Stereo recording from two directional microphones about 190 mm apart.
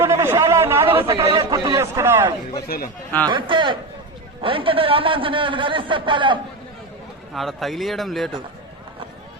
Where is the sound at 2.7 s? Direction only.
50° left (ahead or behind).